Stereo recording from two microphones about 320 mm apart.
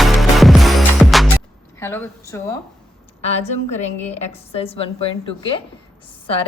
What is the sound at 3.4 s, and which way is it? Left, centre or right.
A woman's voice, left.